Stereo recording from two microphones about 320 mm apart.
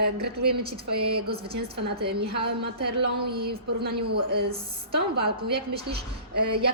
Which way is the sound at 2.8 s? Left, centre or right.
Right.